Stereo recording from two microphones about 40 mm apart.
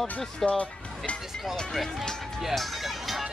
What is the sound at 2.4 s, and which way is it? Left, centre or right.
Music, centre.